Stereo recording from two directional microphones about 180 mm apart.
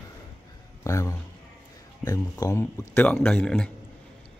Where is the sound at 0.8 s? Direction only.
15° left (ahead or behind).